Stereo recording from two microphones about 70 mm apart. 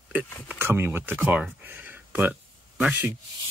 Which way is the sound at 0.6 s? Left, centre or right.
Right.